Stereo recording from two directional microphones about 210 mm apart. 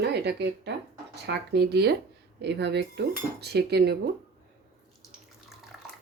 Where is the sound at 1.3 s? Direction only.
50° right (ahead or behind).